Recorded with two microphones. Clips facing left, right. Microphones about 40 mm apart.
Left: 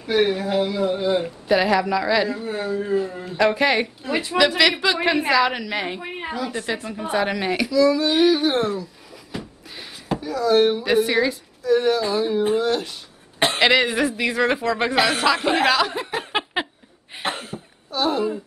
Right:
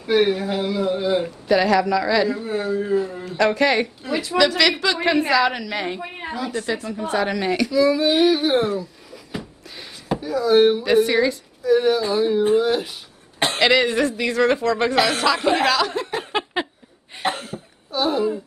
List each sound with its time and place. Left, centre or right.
0.0 s a woman's voice: centre
1.5 s a woman's voice: centre
4.1 s speech: left
4.4 s a woman's voice: centre
7.7 s speech: centre
8.1 s a sound: centre
10.8 s a woman's voice: centre
13.4 s a woman's voice: centre
17.1 s cough: centre